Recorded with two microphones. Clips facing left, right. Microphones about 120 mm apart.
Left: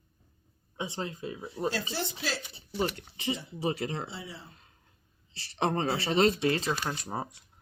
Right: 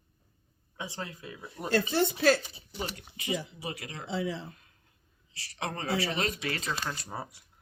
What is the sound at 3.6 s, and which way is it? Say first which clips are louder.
Speech: left 8 dB; 30° left (ahead or behind).